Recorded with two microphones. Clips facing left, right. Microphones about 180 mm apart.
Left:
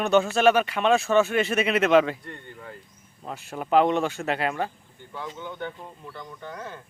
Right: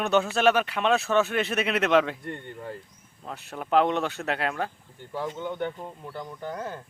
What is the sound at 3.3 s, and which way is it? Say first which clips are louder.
Speech: left 2 dB; centre (ahead or behind).